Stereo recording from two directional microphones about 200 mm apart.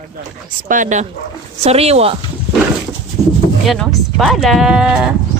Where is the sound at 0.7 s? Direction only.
40° right (ahead or behind).